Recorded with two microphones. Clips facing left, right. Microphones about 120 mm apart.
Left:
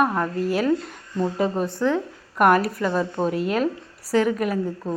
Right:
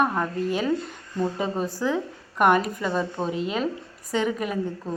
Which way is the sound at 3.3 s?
55° left (ahead or behind).